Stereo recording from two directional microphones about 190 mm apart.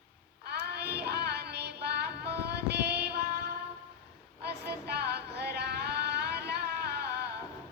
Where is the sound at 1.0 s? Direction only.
60° right (ahead or behind).